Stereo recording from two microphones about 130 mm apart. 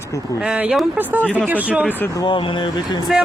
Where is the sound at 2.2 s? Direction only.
40° left (ahead or behind).